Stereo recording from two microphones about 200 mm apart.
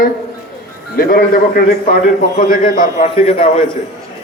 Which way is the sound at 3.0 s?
30° left (ahead or behind).